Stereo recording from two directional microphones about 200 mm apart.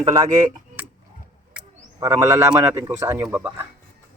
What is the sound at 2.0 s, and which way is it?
Speech, 15° right (ahead or behind).